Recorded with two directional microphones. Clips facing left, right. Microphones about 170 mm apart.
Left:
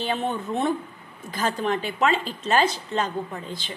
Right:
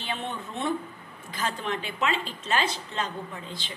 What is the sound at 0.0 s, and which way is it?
A woman's voice, 40° left (ahead or behind).